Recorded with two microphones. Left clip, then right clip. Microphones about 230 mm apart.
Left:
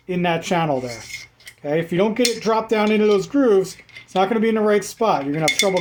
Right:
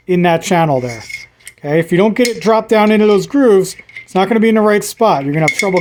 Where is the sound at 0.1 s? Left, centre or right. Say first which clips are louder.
Right 8 dB; right.